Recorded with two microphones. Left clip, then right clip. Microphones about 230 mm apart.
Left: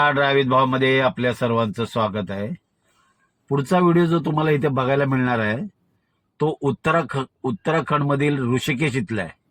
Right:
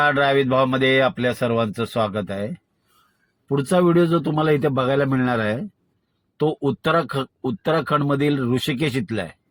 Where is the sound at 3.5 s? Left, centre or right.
Left.